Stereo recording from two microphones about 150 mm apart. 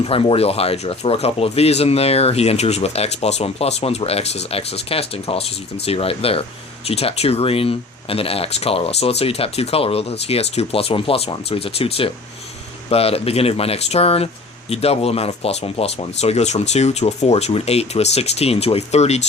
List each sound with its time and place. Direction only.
0.0 s speech: 40° left (ahead or behind)